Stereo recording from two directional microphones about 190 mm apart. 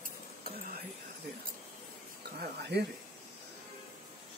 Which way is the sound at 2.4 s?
60° right (ahead or behind).